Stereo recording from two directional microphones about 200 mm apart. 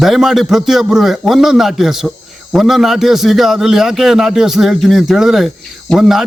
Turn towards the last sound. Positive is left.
turn(degrees=0)  # may be behind; listen again after turning